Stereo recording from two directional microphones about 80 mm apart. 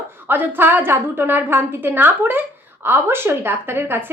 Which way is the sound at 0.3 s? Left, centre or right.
Right.